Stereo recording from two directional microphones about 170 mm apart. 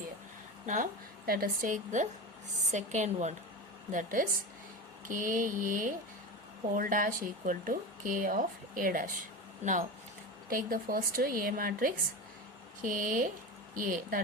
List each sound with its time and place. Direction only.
0.6 s a woman's voice: 45° right (ahead or behind)
10.5 s a woman's voice: 55° right (ahead or behind)